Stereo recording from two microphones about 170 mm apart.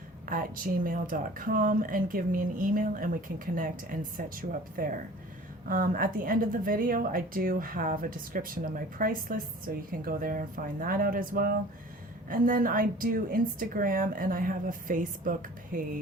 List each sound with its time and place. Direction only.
0.3 s a woman's voice: 55° right (ahead or behind)